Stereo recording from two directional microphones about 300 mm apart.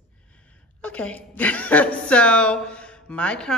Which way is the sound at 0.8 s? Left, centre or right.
Centre.